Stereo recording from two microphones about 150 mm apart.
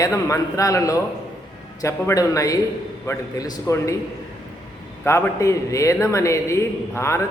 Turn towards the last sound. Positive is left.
turn(degrees=20)  # may be behind; listen again after turning